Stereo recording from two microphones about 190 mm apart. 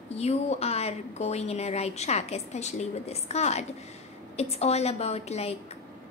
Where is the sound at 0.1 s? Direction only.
35° left (ahead or behind).